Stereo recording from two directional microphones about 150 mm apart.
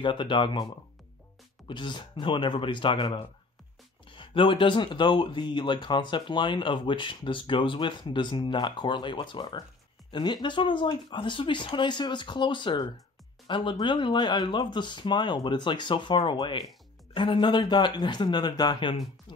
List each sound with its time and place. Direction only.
0.0 s speech: 30° left (ahead or behind)
1.7 s speech: 30° left (ahead or behind)